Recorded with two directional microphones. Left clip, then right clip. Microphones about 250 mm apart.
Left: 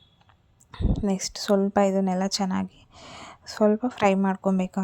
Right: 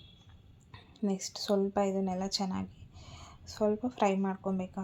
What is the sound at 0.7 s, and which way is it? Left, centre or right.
A woman's voice, left.